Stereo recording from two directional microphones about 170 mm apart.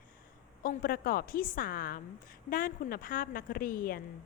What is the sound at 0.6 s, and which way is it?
A woman's voice, 60° left (ahead or behind).